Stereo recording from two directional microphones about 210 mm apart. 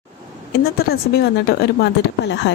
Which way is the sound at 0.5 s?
50° left (ahead or behind).